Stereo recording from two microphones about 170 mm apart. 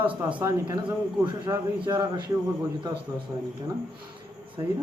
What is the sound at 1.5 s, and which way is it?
Speech, 20° right (ahead or behind).